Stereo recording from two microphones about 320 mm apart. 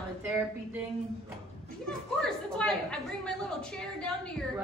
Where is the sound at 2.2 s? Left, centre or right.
Centre.